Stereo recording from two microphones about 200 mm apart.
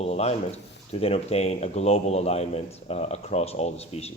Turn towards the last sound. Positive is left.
turn(degrees=30)  # may be behind; listen again after turning